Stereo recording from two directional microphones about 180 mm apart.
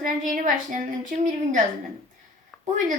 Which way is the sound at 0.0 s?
45° right (ahead or behind).